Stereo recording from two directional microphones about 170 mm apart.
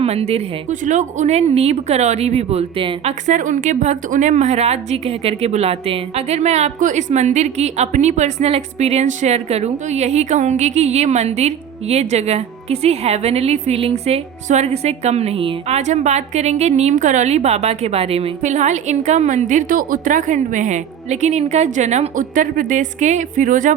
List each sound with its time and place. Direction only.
0.0 s a woman's voice: 35° right (ahead or behind)